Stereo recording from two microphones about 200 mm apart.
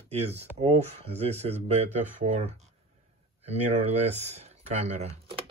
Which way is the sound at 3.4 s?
30° right (ahead or behind).